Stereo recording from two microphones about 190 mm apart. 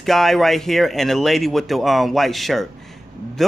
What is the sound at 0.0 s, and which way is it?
Speech, centre (ahead or behind).